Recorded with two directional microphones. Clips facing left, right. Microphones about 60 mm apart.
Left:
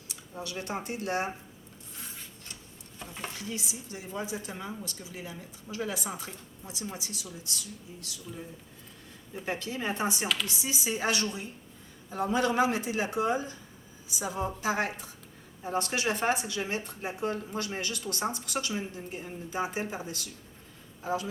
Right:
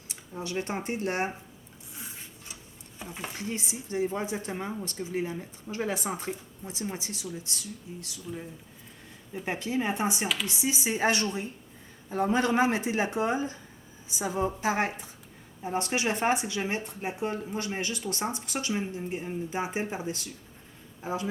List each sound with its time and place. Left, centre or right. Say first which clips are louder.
0.1 s speech: right 4 dB; right
1.9 s a sound: right 2 dB; centre
3.0 s speech: right 1 dB; centre
3.3 s speech: right 3 dB; right
9.4 s speech: right 4 dB; right